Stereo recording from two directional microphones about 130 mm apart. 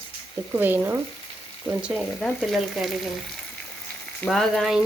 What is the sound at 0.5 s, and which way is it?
Speech, 15° right (ahead or behind).